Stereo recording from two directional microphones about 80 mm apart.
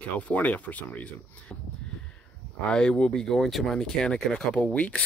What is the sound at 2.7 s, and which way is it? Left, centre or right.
Speech, centre.